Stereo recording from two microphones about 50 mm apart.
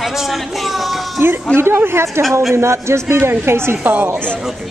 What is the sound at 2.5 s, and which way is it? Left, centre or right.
Speech, right.